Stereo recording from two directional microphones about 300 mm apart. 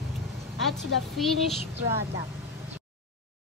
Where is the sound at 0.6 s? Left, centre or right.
Centre.